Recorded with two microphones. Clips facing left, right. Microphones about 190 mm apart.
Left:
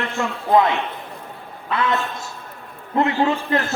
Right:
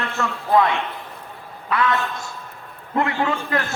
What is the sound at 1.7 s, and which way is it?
Speech, 25° left (ahead or behind).